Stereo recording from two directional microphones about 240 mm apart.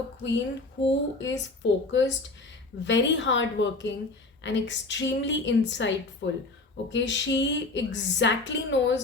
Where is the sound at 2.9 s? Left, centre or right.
Left.